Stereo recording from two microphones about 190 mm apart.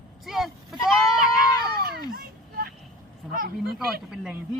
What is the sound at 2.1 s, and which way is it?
Vehicle, 55° right (ahead or behind).